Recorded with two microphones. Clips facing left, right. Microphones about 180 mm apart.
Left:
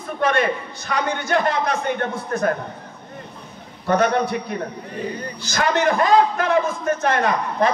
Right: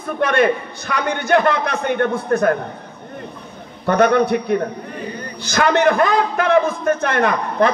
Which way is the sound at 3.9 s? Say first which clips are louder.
Right 4 dB; 60° right (ahead or behind).